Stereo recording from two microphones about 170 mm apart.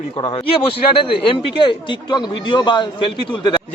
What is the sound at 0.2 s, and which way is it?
A man's voice, 30° left (ahead or behind).